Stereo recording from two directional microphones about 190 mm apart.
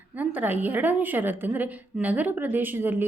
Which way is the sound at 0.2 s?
10° right (ahead or behind).